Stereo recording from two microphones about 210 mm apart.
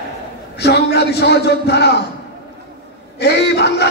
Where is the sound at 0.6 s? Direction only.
50° left (ahead or behind).